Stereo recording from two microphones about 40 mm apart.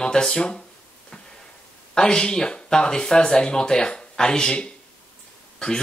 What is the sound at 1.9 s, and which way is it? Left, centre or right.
Speech, centre.